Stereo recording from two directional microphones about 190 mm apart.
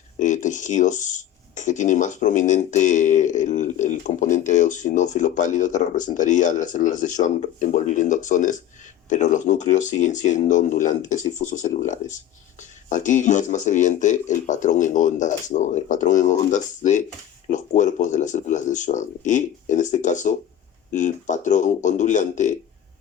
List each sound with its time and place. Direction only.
0.2 s speech: 40° left (ahead or behind)